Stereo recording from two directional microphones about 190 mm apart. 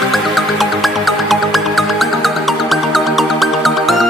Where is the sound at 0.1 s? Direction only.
Centre (ahead or behind).